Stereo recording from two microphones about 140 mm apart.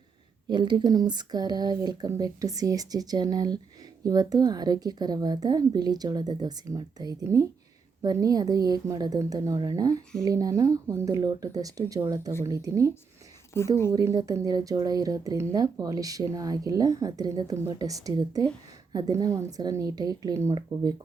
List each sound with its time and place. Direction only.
0.5 s a woman's voice: 35° right (ahead or behind)
13.5 s a woman's voice: 20° left (ahead or behind)
13.9 s a woman's voice: 25° right (ahead or behind)